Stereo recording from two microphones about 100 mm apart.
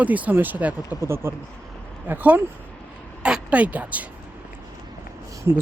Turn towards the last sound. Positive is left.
turn(degrees=-25)  # may be behind; listen again after turning